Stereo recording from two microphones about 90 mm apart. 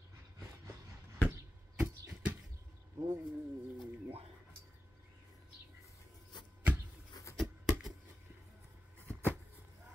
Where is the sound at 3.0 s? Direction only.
45° right (ahead or behind).